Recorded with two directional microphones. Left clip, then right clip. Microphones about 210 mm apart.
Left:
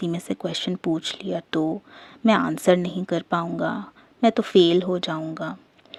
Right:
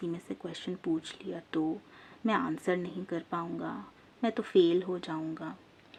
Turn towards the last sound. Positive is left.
turn(degrees=40)  # may be behind; listen again after turning